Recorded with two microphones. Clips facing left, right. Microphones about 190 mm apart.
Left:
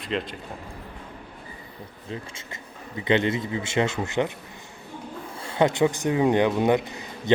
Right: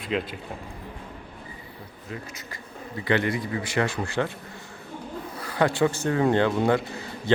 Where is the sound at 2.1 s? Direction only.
25° left (ahead or behind).